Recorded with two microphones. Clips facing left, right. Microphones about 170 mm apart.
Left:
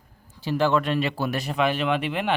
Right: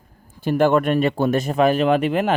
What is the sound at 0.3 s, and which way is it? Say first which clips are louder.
Speech: right 5 dB; 50° right (ahead or behind).